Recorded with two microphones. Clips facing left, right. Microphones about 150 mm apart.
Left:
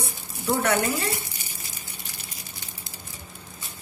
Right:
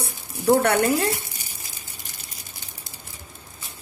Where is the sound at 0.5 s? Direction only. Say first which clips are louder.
Right 4 dB; 60° right (ahead or behind).